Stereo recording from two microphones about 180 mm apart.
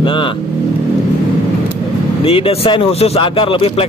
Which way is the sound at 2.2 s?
30° left (ahead or behind).